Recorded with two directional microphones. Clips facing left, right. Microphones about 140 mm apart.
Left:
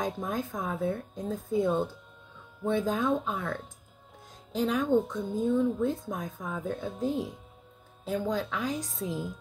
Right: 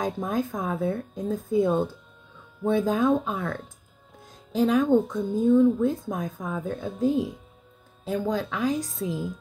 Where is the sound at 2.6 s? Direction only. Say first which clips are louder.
Right 5 dB; 10° right (ahead or behind).